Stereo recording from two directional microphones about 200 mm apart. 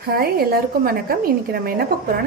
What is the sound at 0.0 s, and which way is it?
A woman's voice, 50° right (ahead or behind).